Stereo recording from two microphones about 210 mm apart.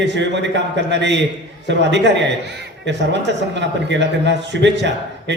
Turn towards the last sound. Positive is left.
turn(degrees=-55)  # may be behind; listen again after turning